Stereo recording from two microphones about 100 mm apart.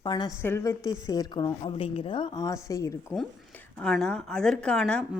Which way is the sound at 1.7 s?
70° left (ahead or behind).